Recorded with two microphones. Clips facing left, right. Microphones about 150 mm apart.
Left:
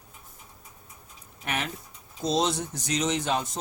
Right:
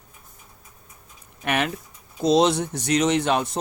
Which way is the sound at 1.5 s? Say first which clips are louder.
Right 8 dB; 70° right (ahead or behind).